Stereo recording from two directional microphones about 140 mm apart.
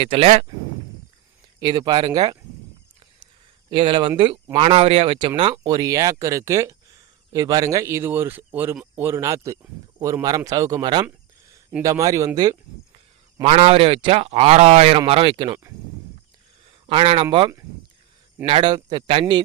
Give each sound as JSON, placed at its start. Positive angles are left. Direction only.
{"t": 0.0, "sound": "speech", "side_deg": -40}
{"t": 1.5, "sound": "speech", "side_deg": -30}
{"t": 3.7, "sound": "speech", "side_deg": -35}
{"t": 11.0, "sound": "a sound", "side_deg": -20}
{"t": 11.8, "sound": "speech", "side_deg": -25}
{"t": 13.4, "sound": "speech", "side_deg": -45}
{"t": 16.8, "sound": "speech", "side_deg": -40}
{"t": 18.4, "sound": "speech", "side_deg": -35}